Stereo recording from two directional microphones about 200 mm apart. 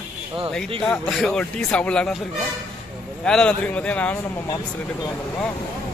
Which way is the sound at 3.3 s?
5° left (ahead or behind).